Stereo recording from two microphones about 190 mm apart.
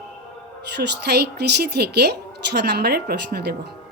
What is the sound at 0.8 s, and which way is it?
A woman's voice, 60° right (ahead or behind).